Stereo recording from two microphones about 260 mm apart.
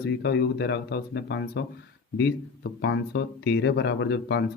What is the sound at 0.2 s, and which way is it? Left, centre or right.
Speech, left.